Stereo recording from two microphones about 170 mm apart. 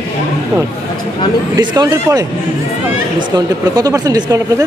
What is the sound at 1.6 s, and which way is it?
Speech, 25° right (ahead or behind).